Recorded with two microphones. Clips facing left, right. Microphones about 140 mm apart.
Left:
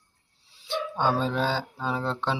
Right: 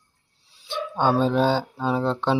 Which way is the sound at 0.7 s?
15° right (ahead or behind).